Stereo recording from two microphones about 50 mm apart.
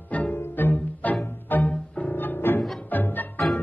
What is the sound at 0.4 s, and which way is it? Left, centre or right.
Music, left.